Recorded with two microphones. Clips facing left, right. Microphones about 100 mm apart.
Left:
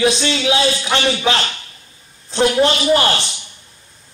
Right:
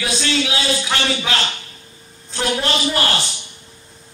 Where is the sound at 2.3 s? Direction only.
20° left (ahead or behind).